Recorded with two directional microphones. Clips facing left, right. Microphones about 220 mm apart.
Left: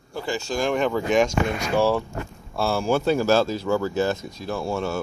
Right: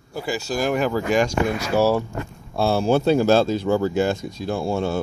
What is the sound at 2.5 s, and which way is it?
Speech, 20° right (ahead or behind).